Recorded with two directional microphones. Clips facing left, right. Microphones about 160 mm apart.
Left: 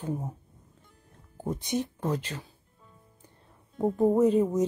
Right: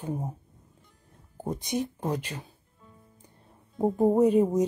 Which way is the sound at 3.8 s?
15° right (ahead or behind).